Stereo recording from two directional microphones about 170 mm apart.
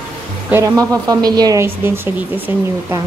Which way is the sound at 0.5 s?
15° right (ahead or behind).